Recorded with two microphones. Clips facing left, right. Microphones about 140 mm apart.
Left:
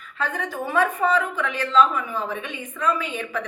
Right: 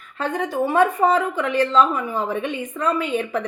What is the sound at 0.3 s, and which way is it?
A woman's voice, 35° right (ahead or behind).